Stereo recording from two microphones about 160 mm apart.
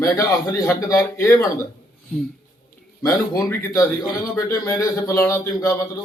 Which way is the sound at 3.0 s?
20° left (ahead or behind).